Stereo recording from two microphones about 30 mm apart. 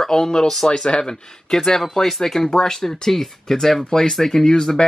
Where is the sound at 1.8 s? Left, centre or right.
Centre.